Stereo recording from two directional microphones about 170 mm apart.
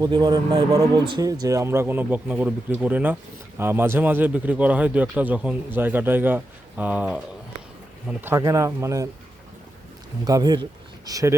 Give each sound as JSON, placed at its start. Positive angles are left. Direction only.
{"t": 0.0, "sound": "a man's voice", "side_deg": -25}
{"t": 10.2, "sound": "speech", "side_deg": -25}